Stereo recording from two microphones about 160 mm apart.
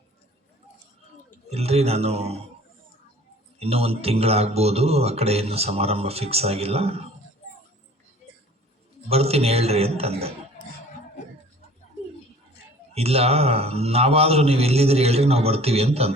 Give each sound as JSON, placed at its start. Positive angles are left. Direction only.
{"t": 1.5, "sound": "speech", "side_deg": -40}
{"t": 3.6, "sound": "speech", "side_deg": -40}
{"t": 9.0, "sound": "speech", "side_deg": -40}
{"t": 12.9, "sound": "speech", "side_deg": -40}